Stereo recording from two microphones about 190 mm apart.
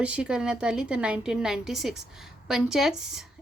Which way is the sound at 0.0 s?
5° right (ahead or behind).